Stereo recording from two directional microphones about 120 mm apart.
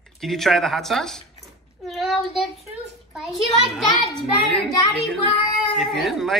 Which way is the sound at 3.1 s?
Centre (ahead or behind).